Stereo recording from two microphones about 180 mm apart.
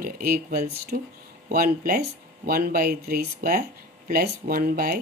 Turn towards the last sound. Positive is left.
turn(degrees=-55)  # may be behind; listen again after turning